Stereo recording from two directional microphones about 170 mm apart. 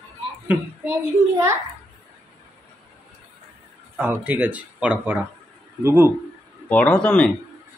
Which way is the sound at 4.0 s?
10° right (ahead or behind).